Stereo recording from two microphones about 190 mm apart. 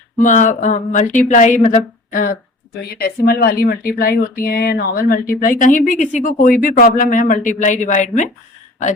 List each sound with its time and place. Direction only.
0.2 s a woman's voice: 40° left (ahead or behind)